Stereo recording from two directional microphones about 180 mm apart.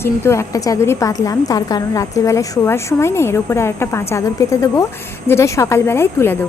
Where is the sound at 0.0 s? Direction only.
15° left (ahead or behind).